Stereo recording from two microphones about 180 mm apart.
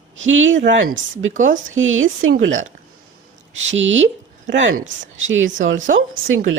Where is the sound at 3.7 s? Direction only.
90° right.